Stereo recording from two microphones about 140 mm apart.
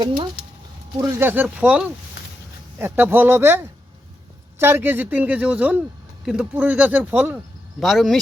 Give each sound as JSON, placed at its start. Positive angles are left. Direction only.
{"t": 0.9, "sound": "a man's voice", "side_deg": -20}
{"t": 7.8, "sound": "speech", "side_deg": 0}